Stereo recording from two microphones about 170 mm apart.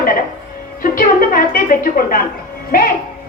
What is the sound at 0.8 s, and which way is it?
Music, 55° left (ahead or behind).